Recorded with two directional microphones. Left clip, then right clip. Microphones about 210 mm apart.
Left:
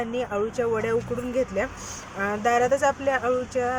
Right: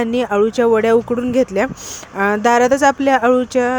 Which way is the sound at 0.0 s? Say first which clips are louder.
Right 11 dB; 45° right (ahead or behind).